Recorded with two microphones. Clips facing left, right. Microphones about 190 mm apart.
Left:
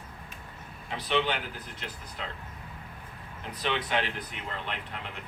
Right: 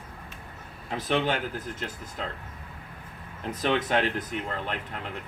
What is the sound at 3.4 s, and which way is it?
Speech, 45° right (ahead or behind).